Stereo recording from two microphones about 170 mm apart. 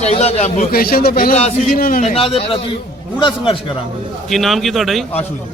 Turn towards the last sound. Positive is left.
turn(degrees=0)  # may be behind; listen again after turning